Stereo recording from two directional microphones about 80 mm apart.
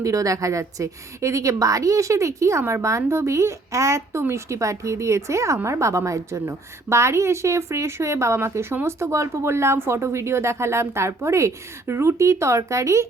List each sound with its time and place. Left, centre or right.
0.0 s a woman's voice: right